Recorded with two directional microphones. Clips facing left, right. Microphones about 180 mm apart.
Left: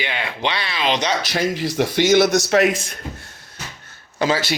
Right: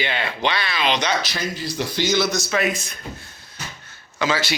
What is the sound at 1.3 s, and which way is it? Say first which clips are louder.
Speech: left 6 dB; 85° left.